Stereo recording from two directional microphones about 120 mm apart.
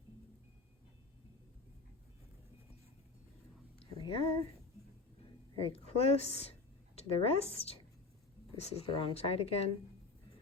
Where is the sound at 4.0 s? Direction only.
50° left (ahead or behind).